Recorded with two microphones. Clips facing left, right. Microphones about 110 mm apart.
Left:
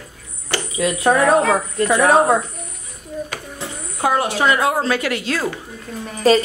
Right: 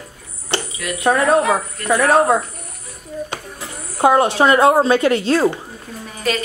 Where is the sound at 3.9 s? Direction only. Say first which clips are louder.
Right 5 dB; 30° right (ahead or behind).